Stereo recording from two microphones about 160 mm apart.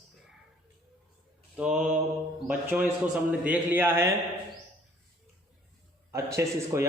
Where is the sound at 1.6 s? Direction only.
5° right (ahead or behind).